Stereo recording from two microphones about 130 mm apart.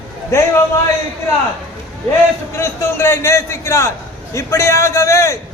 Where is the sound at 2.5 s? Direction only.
20° left (ahead or behind).